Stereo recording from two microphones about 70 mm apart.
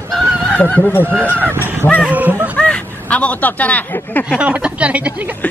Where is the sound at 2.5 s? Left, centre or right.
Centre.